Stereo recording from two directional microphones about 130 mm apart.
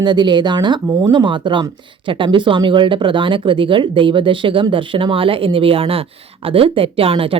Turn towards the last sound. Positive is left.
turn(degrees=-45)  # may be behind; listen again after turning